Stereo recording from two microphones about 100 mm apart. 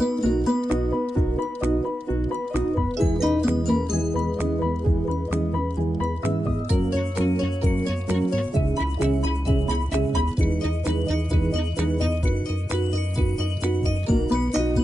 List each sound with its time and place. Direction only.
0.0 s music: centre (ahead or behind)
3.0 s music: 5° right (ahead or behind)